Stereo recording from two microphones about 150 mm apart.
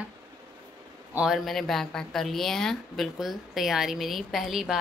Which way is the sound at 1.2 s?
Centre (ahead or behind).